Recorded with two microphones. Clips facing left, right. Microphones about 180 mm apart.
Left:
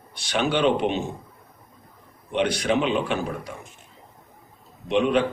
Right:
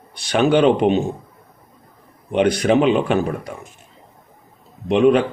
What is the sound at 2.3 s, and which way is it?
Speech, 50° right (ahead or behind).